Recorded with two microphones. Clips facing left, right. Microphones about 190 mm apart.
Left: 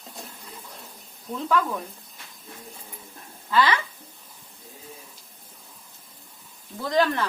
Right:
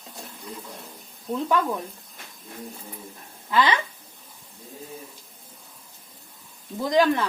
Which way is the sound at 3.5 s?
20° right (ahead or behind).